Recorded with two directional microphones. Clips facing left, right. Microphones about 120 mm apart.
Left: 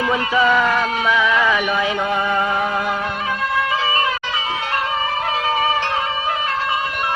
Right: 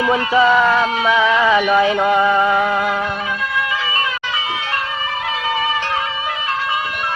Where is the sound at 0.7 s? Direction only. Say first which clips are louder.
Right 3 dB; 25° right (ahead or behind).